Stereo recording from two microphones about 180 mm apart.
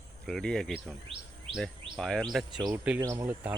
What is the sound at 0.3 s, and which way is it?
Speech, 5° left (ahead or behind).